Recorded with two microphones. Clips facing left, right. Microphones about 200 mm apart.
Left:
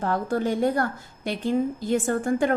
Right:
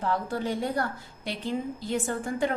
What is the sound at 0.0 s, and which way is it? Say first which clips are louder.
A woman's voice: left 4 dB; 50° left (ahead or behind).